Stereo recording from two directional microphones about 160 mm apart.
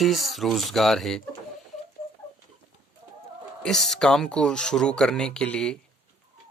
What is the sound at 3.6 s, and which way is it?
A man's voice, centre (ahead or behind).